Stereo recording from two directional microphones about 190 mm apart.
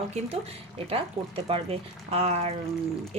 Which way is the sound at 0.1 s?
30° right (ahead or behind).